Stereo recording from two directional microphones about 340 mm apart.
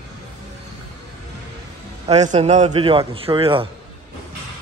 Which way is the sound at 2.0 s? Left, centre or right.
Centre.